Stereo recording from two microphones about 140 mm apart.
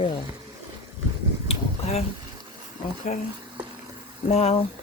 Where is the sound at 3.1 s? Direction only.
60° left (ahead or behind).